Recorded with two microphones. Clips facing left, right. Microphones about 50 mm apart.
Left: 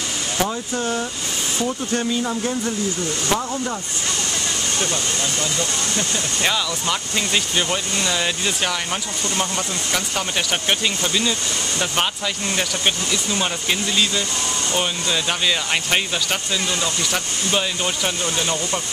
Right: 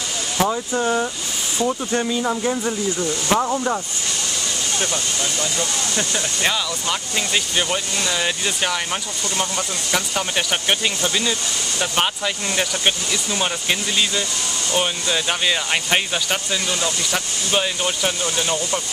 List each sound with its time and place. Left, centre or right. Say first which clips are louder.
0.4 s speech: right 4 dB; centre
6.4 s speech: left 1 dB; centre
9.9 s speech: right 2 dB; centre
12.5 s speech: right 1 dB; centre
17.6 s speech: right 2 dB; centre